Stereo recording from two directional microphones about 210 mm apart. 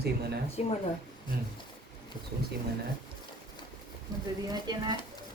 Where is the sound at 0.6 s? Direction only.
30° left (ahead or behind).